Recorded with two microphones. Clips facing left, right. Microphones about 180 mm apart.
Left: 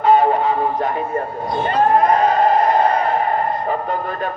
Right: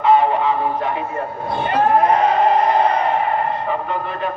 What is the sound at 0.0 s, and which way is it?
Music, 40° left (ahead or behind).